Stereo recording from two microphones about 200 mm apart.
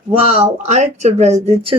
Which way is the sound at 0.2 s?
30° right (ahead or behind).